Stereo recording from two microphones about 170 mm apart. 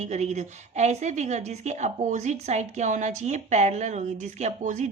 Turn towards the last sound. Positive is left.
turn(degrees=-45)  # may be behind; listen again after turning